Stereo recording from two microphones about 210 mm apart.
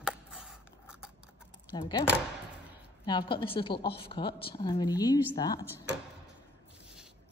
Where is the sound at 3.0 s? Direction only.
20° left (ahead or behind).